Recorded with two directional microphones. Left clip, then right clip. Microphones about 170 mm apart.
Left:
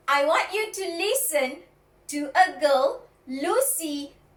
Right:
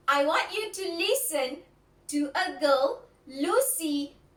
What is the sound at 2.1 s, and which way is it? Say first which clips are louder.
A woman's voice: left 8 dB; 15° right (ahead or behind).